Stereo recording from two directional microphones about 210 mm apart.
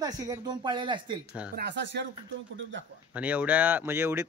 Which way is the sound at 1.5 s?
55° right (ahead or behind).